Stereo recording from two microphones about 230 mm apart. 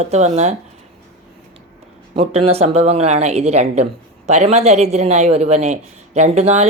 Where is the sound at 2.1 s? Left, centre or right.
Right.